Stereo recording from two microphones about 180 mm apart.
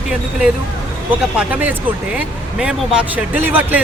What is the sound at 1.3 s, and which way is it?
Speech, 10° right (ahead or behind).